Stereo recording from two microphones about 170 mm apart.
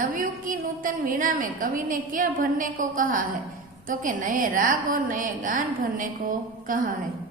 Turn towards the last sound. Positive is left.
turn(degrees=-50)  # may be behind; listen again after turning